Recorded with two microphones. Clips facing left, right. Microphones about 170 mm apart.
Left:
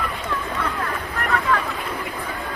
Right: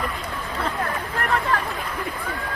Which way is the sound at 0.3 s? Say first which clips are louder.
Left 5 dB; 80° left.